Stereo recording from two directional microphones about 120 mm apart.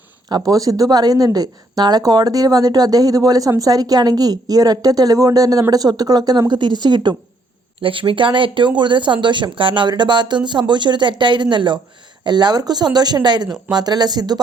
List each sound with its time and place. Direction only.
0.3 s speech: 30° right (ahead or behind)